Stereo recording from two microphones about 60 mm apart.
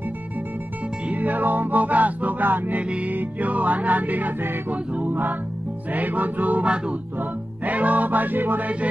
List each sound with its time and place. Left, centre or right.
1.0 s music: right
2.8 s music: right